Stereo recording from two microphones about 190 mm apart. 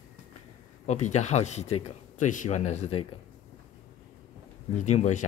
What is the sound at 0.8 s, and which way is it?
Speech, 40° left (ahead or behind).